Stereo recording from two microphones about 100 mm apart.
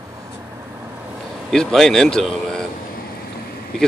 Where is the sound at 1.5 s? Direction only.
5° left (ahead or behind).